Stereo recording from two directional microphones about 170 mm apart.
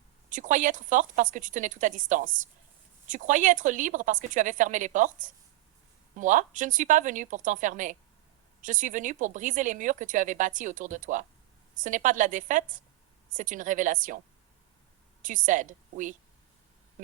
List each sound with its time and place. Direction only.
0.3 s speech: 50° right (ahead or behind)
15.2 s speech: 50° right (ahead or behind)